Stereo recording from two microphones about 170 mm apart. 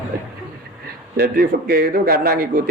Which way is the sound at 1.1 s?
60° right (ahead or behind).